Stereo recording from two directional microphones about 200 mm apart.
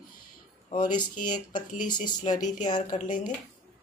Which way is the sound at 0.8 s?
20° left (ahead or behind).